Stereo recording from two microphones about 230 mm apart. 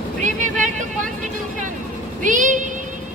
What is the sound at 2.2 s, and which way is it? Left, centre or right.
Child singing, right.